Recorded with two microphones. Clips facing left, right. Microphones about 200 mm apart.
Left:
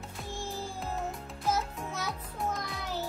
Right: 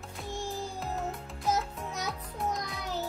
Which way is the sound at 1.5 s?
20° right (ahead or behind).